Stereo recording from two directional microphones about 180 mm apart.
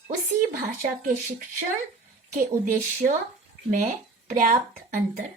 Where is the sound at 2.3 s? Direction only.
50° right (ahead or behind).